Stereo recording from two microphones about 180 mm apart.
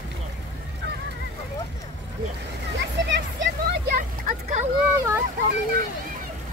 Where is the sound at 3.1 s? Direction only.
75° right (ahead or behind); by 4.6 s 50° right (ahead or behind).